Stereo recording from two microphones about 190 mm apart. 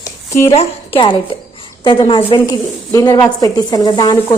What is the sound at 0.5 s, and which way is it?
A woman's voice, 25° left (ahead or behind).